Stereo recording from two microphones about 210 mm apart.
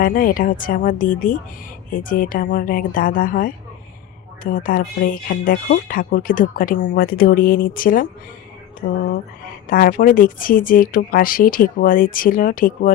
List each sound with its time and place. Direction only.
0.0 s speech: 40° left (ahead or behind)